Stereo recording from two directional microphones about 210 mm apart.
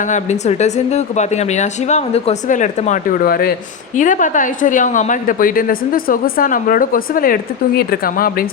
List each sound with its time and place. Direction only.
0.0 s a woman's voice: 35° left (ahead or behind)